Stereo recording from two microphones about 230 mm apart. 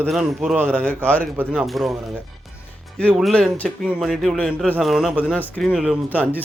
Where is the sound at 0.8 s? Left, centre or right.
Centre.